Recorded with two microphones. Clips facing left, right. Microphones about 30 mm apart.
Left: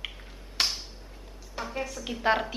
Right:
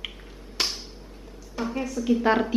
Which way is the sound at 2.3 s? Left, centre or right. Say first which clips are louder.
Right 2 dB; centre.